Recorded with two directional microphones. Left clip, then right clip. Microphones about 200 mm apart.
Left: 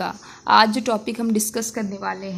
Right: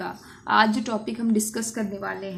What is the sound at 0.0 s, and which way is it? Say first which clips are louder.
A woman's voice: left 7 dB; 40° left (ahead or behind).